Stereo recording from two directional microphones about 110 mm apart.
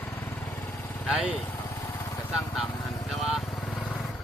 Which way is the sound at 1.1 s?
10° right (ahead or behind).